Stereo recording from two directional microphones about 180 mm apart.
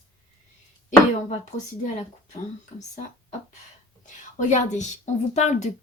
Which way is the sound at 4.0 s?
45° left (ahead or behind).